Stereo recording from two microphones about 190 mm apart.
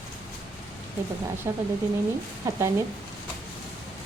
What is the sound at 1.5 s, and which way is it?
Speech, 15° right (ahead or behind).